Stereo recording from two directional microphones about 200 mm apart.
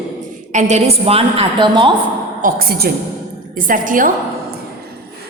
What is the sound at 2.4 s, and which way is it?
A woman's voice, 50° right (ahead or behind).